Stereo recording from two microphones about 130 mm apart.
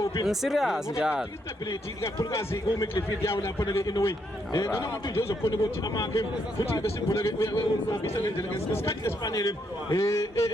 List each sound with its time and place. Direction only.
0.0 s a sound: 25° left (ahead or behind)
0.3 s speech: centre (ahead or behind)
1.7 s a man's voice: 25° left (ahead or behind)